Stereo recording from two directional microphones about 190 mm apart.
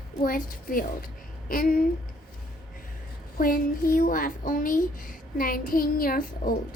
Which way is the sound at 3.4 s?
50° left (ahead or behind).